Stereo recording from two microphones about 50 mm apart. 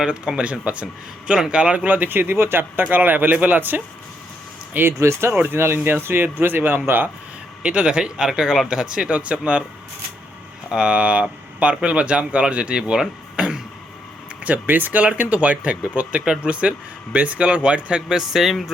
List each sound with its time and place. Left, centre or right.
0.0 s speech: centre; by 4.9 s right
4.9 s speech: right
5.5 s speech: right
7.6 s speech: right
10.7 s speech: centre
14.4 s speech: right
18.1 s speech: centre